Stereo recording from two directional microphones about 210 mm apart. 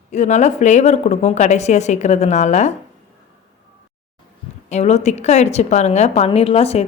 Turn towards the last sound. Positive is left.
turn(degrees=30)  # may be behind; listen again after turning